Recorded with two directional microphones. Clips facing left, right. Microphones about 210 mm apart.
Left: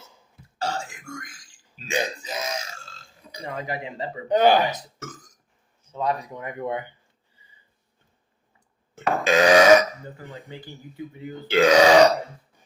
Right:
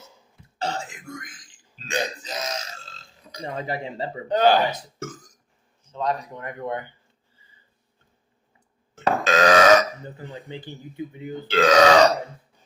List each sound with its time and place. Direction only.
0.6 s burping: 20° right (ahead or behind)
1.1 s a man's voice: 20° right (ahead or behind)
1.8 s speech: 10° left (ahead or behind)
3.4 s speech: 30° right (ahead or behind)
4.3 s speech: 10° left (ahead or behind)
5.9 s speech: 10° left (ahead or behind)
9.0 s burping: 10° left (ahead or behind)
10.2 s speech: 20° right (ahead or behind)
11.4 s speech: 10° left (ahead or behind)